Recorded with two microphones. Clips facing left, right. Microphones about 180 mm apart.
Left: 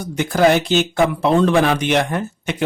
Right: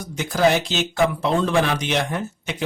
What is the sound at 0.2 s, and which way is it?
Speech, 60° left (ahead or behind).